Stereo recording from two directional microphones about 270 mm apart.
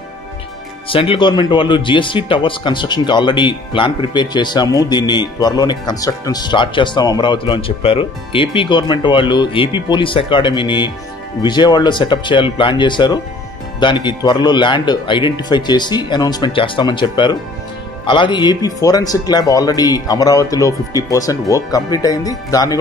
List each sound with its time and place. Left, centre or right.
0.8 s speech: centre